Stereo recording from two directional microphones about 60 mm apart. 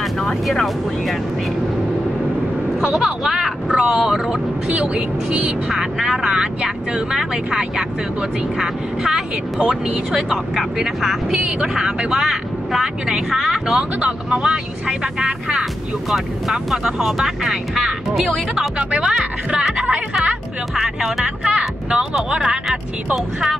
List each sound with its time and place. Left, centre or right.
0.0 s speech: centre
2.8 s speech: centre
16.7 s speech: centre
18.9 s speech: right
20.2 s speech: centre
21.5 s speech: right